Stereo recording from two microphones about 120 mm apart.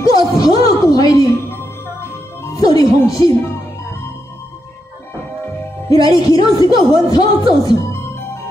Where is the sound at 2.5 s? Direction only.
30° left (ahead or behind).